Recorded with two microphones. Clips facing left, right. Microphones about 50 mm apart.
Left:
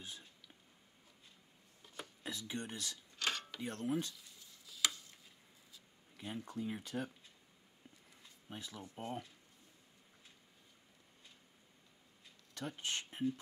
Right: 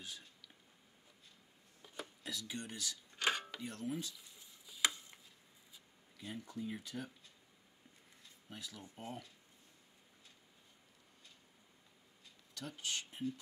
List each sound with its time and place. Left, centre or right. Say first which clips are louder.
2.2 s speech: left 2 dB; left
2.6 s speech: left 1 dB; left
3.2 s a sound: right 3 dB; centre
3.6 s speech: left 6 dB; left
4.2 s tick-tock: even; centre
6.1 s speech: left 2 dB; left
8.5 s speech: left 2 dB; left
12.5 s speech: left 2 dB; left